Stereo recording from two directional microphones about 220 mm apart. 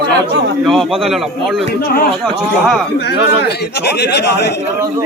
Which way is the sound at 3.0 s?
50° left (ahead or behind).